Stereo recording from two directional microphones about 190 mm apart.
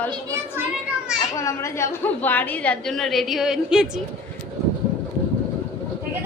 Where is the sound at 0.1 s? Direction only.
20° right (ahead or behind).